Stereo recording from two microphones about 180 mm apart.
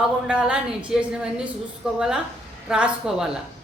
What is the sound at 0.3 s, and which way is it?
Speech, 5° right (ahead or behind).